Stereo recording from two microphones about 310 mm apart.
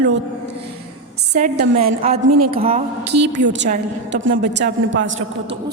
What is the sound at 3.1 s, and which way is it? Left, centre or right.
A woman's voice, right.